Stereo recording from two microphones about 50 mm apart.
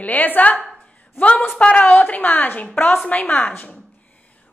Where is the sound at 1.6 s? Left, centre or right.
Left.